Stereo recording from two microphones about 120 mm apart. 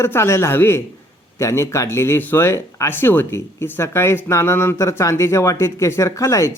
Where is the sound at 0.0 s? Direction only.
20° left (ahead or behind).